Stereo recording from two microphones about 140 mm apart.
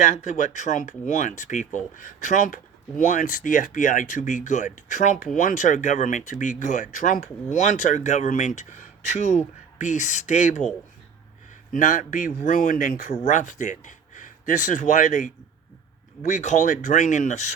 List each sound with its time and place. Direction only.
0.0 s speech: 55° left (ahead or behind)
11.7 s speech: 70° left (ahead or behind)